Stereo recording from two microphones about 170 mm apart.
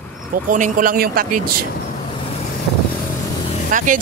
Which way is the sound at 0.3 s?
50° right (ahead or behind).